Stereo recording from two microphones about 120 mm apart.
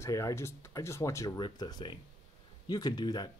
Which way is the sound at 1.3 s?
40° left (ahead or behind).